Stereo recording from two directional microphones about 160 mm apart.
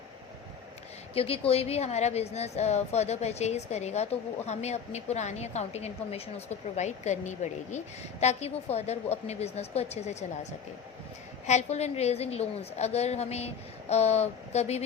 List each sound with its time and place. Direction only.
1.1 s a woman's voice: 40° left (ahead or behind)
11.4 s a woman's voice: 45° left (ahead or behind)